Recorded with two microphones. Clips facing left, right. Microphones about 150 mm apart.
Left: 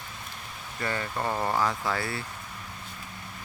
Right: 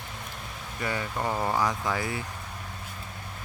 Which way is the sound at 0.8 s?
10° right (ahead or behind).